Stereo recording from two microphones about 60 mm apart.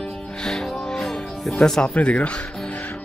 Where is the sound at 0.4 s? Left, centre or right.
Centre.